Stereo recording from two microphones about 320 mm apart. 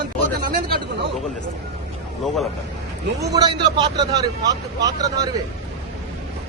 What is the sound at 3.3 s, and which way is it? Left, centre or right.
Speech, centre.